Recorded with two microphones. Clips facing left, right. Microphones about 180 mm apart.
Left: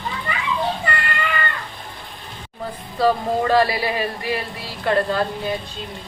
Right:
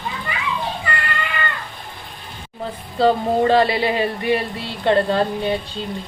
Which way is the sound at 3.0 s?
25° right (ahead or behind).